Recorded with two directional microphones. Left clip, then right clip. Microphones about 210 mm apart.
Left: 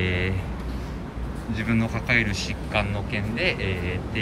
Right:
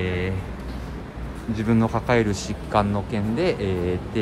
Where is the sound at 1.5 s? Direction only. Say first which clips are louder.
Right 4 dB; 15° right (ahead or behind).